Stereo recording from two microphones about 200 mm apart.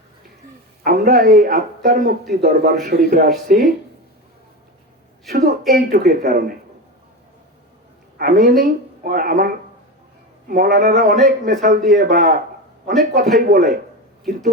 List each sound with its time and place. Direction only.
0.9 s speech: 45° right (ahead or behind)
5.3 s speech: 50° right (ahead or behind)
8.2 s speech: 45° right (ahead or behind)
10.5 s speech: 45° right (ahead or behind)